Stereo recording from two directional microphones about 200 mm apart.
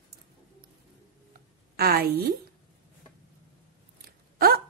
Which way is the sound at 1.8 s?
50° right (ahead or behind).